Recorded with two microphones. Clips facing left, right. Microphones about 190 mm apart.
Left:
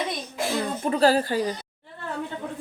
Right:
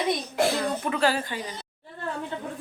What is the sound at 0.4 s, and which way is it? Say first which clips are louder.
Speech: right 5 dB; 75° right (ahead or behind).